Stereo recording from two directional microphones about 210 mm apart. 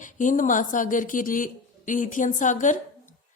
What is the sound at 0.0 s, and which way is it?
A woman's voice, 40° left (ahead or behind).